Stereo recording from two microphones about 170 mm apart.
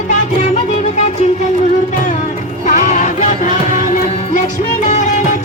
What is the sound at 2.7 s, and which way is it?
Music, 45° left (ahead or behind).